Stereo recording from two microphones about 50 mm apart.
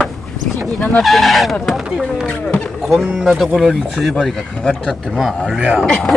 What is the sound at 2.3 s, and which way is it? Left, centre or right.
Speech, left.